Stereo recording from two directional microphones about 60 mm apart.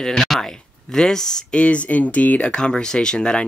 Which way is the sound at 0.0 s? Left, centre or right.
Centre.